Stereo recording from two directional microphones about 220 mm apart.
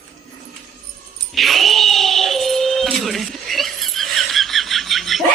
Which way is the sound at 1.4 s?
Centre (ahead or behind).